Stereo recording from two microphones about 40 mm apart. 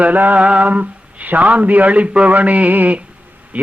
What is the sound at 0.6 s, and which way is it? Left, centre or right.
Mantra, right.